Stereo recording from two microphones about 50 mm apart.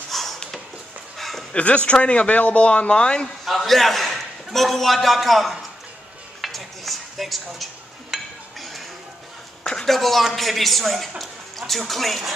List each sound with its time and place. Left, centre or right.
0.1 s a sound: centre
1.5 s speech: left
3.4 s a man's voice: centre
6.4 s dishes: centre
9.6 s a sound: centre
9.8 s speech: centre